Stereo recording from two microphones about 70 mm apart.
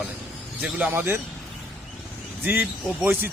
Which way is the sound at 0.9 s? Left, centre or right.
Right.